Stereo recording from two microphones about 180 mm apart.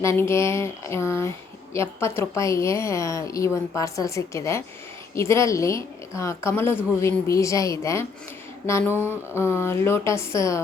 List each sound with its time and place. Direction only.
0.0 s a woman's voice: 15° left (ahead or behind)